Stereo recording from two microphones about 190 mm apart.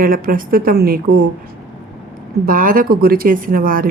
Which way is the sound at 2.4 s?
45° right (ahead or behind).